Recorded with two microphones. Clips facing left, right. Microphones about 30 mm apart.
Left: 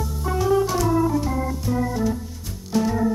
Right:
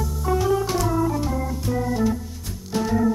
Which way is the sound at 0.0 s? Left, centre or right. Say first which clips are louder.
Right 3 dB; centre.